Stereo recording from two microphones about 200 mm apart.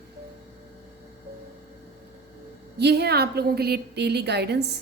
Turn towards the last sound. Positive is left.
turn(degrees=-55)  # may be behind; listen again after turning